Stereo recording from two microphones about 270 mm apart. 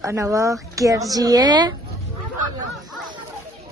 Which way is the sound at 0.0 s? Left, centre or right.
Centre.